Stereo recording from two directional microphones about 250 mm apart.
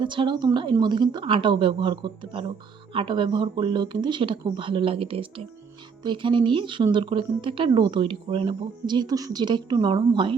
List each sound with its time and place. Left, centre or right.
0.0 s speech: centre